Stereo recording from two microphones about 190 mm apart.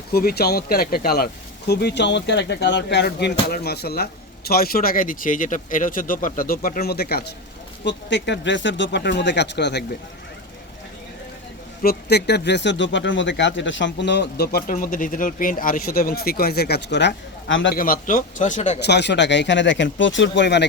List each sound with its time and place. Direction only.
0.1 s speech: 55° left (ahead or behind)
7.9 s speech: 70° left (ahead or behind)
11.8 s speech: 55° left (ahead or behind); by 17.7 s 70° left (ahead or behind)
17.7 s speech: 50° left (ahead or behind)
18.8 s speech: 65° left (ahead or behind)